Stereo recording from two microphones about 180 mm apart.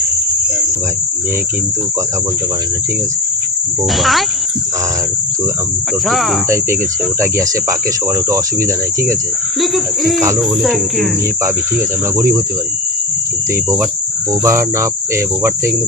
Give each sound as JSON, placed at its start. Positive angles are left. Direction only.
{"t": 3.9, "sound": "speech", "side_deg": 0}
{"t": 6.1, "sound": "speech", "side_deg": 0}
{"t": 7.2, "sound": "speech", "side_deg": -15}
{"t": 9.6, "sound": "speech", "side_deg": 0}
{"t": 12.1, "sound": "speech", "side_deg": -15}
{"t": 14.4, "sound": "speech", "side_deg": -15}